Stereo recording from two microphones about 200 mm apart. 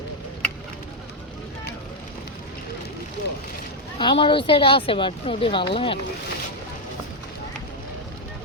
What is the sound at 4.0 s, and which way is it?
Speech, 25° left (ahead or behind).